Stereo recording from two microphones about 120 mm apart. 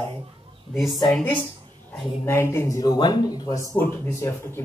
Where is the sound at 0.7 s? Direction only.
Centre (ahead or behind).